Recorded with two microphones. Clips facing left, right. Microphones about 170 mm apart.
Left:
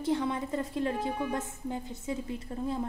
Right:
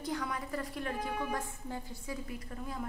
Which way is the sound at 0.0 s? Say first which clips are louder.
Left 7 dB; 25° left (ahead or behind).